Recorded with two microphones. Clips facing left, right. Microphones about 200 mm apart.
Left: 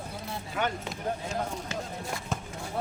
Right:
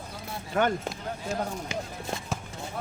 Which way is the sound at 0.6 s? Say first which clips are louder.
Right 6 dB; 50° right (ahead or behind).